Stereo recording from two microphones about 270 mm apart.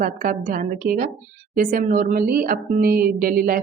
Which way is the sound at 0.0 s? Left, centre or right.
Right.